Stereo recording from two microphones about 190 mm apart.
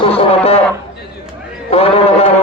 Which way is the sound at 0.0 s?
30° left (ahead or behind).